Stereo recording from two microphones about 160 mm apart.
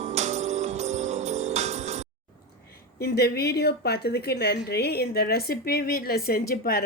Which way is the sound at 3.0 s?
85° left.